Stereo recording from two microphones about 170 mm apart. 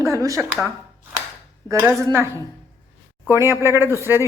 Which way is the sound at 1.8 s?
15° right (ahead or behind).